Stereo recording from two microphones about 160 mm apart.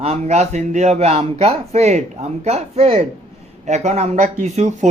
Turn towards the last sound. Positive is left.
turn(degrees=-45)  # may be behind; listen again after turning